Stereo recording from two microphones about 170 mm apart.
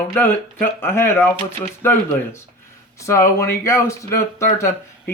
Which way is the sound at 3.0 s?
15° left (ahead or behind).